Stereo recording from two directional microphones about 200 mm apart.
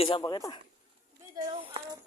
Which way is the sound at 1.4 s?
20° right (ahead or behind).